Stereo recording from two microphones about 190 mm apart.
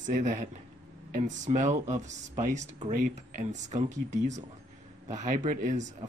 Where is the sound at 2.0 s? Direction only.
40° right (ahead or behind).